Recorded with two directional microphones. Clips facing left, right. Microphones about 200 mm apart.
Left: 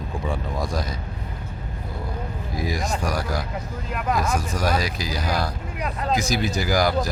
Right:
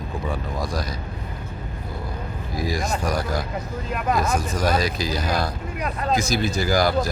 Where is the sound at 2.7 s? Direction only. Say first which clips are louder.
Right 2 dB; 15° left (ahead or behind).